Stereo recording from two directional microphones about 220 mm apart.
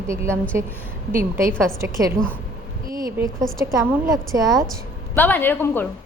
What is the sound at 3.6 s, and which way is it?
A woman's voice, 15° right (ahead or behind).